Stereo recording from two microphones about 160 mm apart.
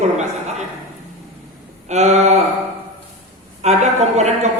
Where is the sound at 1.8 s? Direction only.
45° right (ahead or behind).